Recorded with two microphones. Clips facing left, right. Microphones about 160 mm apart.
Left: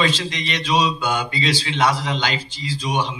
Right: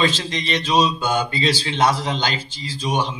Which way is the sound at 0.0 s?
40° right (ahead or behind).